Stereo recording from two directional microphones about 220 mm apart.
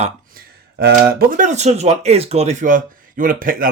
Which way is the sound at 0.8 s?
45° right (ahead or behind).